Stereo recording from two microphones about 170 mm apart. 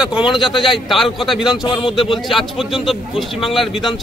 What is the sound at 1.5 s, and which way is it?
Speech, 30° left (ahead or behind).